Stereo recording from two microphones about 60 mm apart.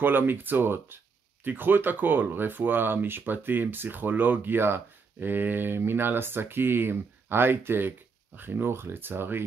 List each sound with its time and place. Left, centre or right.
0.0 s speech: right